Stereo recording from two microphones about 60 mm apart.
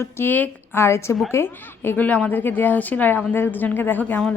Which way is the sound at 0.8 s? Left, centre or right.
Left.